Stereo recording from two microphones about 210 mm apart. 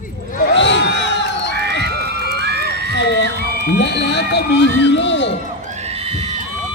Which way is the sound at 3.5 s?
50° left (ahead or behind).